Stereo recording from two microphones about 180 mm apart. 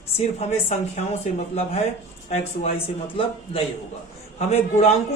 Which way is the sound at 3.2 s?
30° left (ahead or behind).